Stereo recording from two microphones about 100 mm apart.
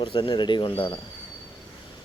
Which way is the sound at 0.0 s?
55° left (ahead or behind).